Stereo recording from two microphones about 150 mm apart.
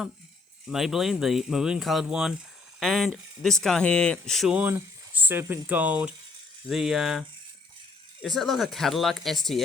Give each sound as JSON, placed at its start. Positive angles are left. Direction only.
{"t": 0.7, "sound": "speech", "side_deg": -5}
{"t": 8.4, "sound": "speech", "side_deg": 0}